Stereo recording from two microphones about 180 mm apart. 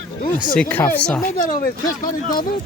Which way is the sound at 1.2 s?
50° left (ahead or behind).